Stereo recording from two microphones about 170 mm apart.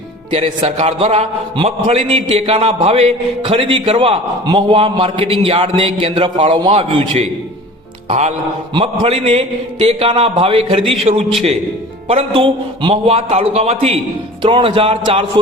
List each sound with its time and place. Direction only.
0.3 s a man's voice: 35° right (ahead or behind)
8.7 s a man's voice: 35° right (ahead or behind)